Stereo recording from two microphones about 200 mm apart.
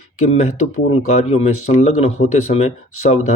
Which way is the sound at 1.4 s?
35° left (ahead or behind).